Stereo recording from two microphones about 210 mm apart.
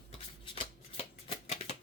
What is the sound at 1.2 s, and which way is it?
Music, 30° left (ahead or behind).